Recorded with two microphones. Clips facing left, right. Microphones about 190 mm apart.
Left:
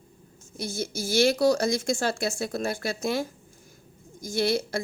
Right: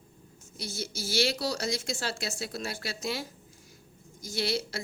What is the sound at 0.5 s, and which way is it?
A woman's voice, 50° left (ahead or behind).